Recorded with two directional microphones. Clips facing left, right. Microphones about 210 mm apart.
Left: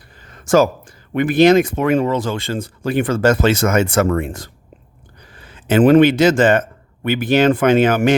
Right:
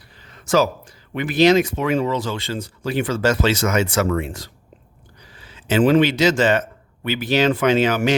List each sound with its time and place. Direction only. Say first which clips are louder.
0.2 s a man's voice: left 4 dB; 50° left (ahead or behind)